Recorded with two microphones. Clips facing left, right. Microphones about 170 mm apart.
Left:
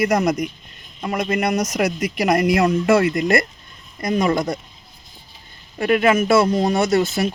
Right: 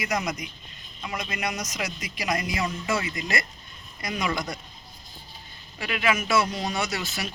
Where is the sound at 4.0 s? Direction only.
45° left (ahead or behind).